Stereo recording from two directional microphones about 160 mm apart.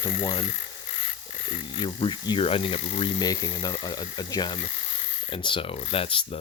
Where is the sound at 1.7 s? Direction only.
30° left (ahead or behind).